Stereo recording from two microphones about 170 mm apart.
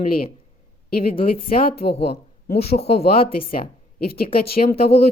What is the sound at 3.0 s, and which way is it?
Speech, 60° left (ahead or behind).